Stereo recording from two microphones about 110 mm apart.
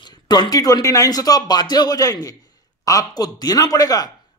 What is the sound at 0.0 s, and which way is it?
Speech, 40° left (ahead or behind).